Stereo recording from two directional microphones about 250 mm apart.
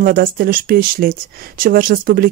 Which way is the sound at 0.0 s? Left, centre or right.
Right.